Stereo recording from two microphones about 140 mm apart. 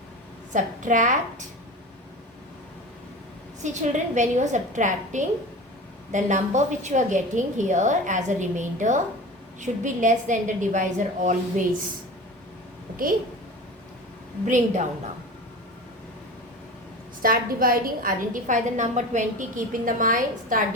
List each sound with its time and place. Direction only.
0.5 s a woman's voice: 65° right (ahead or behind)
3.6 s a woman's voice: 55° right (ahead or behind)
14.4 s a woman's voice: 65° right (ahead or behind)
17.2 s a woman's voice: 90° right; by 20.7 s 75° right (ahead or behind)